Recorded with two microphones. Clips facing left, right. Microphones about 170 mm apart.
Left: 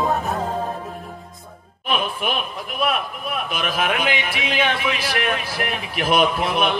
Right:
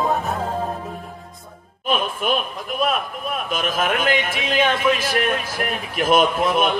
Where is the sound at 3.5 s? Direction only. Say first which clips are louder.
Right 2 dB; 45° right (ahead or behind).